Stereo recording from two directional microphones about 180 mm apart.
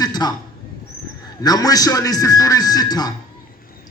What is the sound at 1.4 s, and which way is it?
A man's voice, 20° left (ahead or behind).